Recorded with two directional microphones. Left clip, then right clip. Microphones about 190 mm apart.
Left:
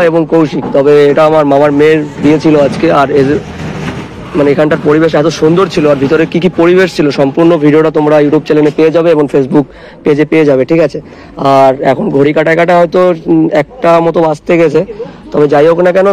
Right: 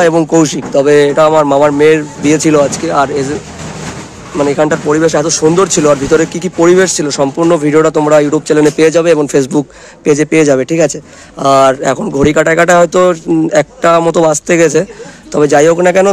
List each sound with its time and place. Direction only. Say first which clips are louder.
0.0 s speech: left 1 dB; 45° right (ahead or behind)
1.1 s speech: left 1 dB; 10° right (ahead or behind)
1.9 s speech: left 1 dB; 25° right (ahead or behind)
2.7 s speech: left 4 dB; centre (ahead or behind)
4.4 s speech: left 3 dB; 5° right (ahead or behind)
6.1 s speech: left 2 dB; centre (ahead or behind); by 8.7 s 20° right (ahead or behind)
8.7 s speech: left 1 dB; 30° right (ahead or behind)
15.3 s speech: left 1 dB; 45° right (ahead or behind)